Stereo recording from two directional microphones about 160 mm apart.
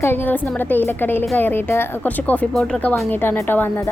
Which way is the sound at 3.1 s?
15° left (ahead or behind).